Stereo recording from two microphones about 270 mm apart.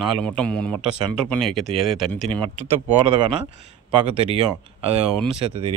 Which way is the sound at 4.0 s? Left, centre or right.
Right.